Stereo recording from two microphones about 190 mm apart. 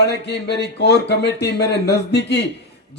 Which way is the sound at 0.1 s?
60° left (ahead or behind).